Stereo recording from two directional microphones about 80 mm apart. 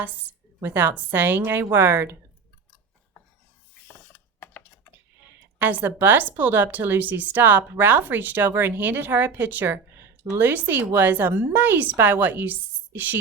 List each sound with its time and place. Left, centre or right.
0.6 s a woman's voice: right
3.8 s a sound: left
5.5 s a woman's voice: right